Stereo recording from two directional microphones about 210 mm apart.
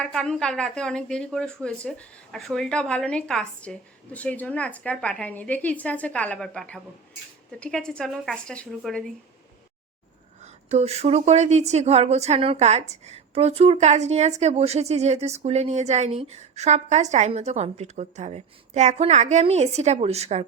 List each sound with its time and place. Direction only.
0.0 s a woman's voice: 5° left (ahead or behind)
10.4 s speech: 30° right (ahead or behind)